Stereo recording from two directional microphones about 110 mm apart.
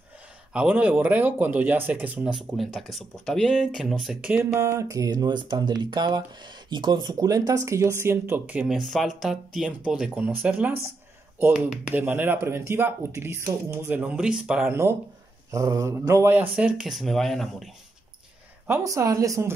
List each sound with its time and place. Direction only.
0.5 s speech: 10° right (ahead or behind)
2.5 s speech: centre (ahead or behind)
4.3 s speech: 25° right (ahead or behind)
8.6 s speech: centre (ahead or behind)
15.5 s speech: 30° right (ahead or behind); by 17.6 s 5° left (ahead or behind)
18.7 s speech: 30° right (ahead or behind)